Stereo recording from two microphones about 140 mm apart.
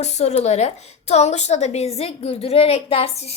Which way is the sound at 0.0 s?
50° left (ahead or behind).